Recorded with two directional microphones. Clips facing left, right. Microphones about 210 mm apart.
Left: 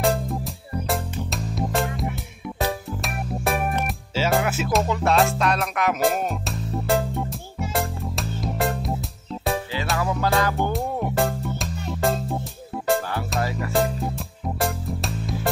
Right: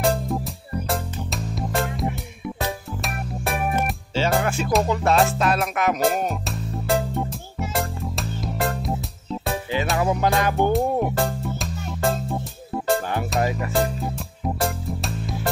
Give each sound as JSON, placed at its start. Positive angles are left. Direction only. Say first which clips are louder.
{"t": 0.0, "sound": "music", "louder": "right 1 dB", "side_deg": 0}
{"t": 9.9, "sound": "music", "louder": "even", "side_deg": -20}
{"t": 10.7, "sound": "music", "louder": "right 5 dB", "side_deg": 0}
{"t": 13.4, "sound": "music", "louder": "right 3 dB", "side_deg": -20}
{"t": 13.7, "sound": "music", "louder": "even", "side_deg": 0}